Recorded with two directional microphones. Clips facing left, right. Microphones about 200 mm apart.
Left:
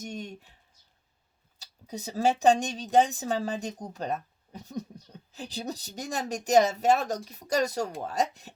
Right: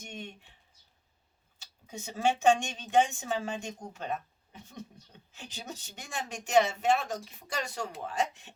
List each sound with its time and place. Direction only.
0.0 s speech: 40° left (ahead or behind)
1.5 s a sound: 35° left (ahead or behind)
2.2 s speech: 35° left (ahead or behind)